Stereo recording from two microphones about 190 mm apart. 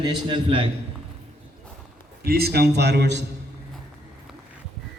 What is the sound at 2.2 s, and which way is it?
A man's voice, 55° right (ahead or behind).